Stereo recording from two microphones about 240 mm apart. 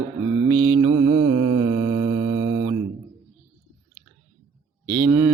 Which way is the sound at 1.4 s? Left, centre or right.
Centre.